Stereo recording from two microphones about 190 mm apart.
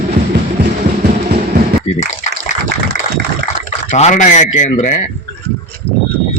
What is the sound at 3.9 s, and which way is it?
Speech, 40° left (ahead or behind).